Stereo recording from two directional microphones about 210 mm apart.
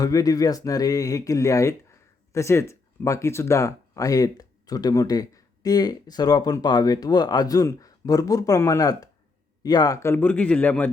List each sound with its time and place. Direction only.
0.0 s speech: 15° left (ahead or behind)